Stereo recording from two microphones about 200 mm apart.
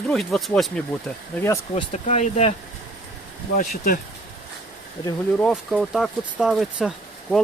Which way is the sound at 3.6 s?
45° left (ahead or behind).